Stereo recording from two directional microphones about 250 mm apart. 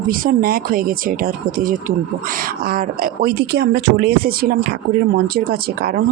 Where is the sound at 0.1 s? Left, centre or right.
Right.